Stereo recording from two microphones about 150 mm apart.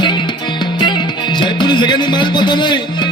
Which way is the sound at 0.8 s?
30° left (ahead or behind).